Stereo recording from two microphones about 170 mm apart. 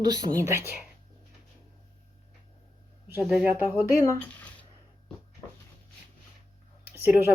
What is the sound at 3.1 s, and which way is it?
Speech, 5° right (ahead or behind).